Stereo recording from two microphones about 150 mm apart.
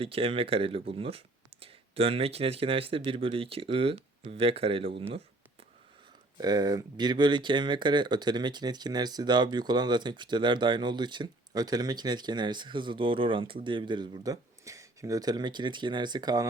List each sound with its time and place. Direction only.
0.0 s speech: 40° right (ahead or behind)
6.3 s speech: 25° right (ahead or behind)